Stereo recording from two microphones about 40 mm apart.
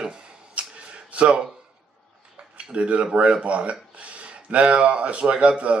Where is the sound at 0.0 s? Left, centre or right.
Centre.